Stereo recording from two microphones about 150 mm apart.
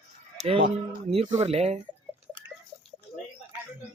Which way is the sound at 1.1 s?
45° right (ahead or behind).